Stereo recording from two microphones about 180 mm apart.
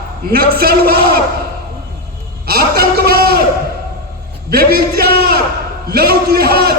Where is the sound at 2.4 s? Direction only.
55° right (ahead or behind).